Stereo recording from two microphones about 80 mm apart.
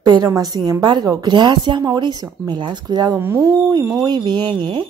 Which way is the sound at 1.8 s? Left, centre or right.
Right.